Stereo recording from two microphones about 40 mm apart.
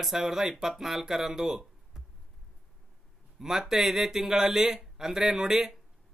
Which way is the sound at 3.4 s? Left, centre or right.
Centre.